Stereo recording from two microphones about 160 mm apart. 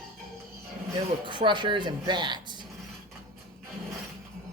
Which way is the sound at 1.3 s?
30° right (ahead or behind).